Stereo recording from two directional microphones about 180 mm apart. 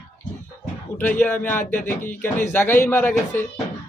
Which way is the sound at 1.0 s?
10° left (ahead or behind).